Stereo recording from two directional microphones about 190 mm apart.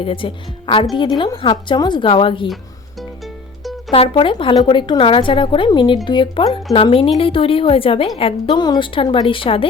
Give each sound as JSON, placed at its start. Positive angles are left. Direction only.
{"t": 0.0, "sound": "speech", "side_deg": 30}
{"t": 3.9, "sound": "speech", "side_deg": 30}